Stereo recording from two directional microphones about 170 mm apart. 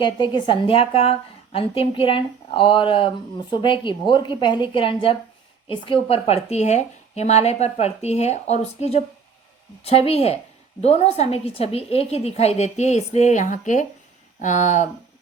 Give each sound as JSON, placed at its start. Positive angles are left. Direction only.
{"t": 0.0, "sound": "a woman's voice", "side_deg": 25}